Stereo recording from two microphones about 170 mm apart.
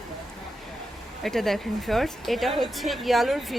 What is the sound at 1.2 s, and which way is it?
A woman's voice, centre (ahead or behind).